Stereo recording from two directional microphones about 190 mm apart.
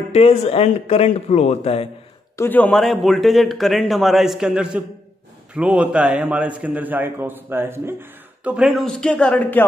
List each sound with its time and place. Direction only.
0.1 s speech: 30° left (ahead or behind)
2.3 s a man's voice: 10° left (ahead or behind)